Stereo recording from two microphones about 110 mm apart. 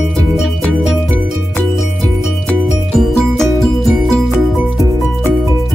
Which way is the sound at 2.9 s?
5° left (ahead or behind).